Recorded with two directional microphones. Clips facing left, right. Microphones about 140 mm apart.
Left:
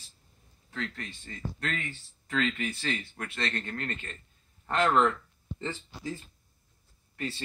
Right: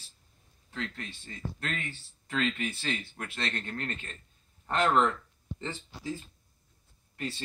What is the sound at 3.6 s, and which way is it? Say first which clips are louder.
Speech: left 1 dB; 15° right (ahead or behind).